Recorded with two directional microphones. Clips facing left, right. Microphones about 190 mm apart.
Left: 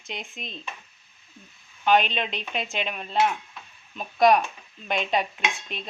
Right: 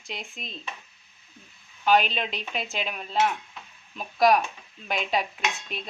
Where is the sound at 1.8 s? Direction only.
5° right (ahead or behind).